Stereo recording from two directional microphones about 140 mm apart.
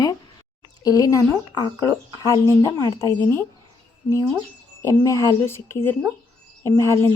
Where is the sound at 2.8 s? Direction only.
30° left (ahead or behind).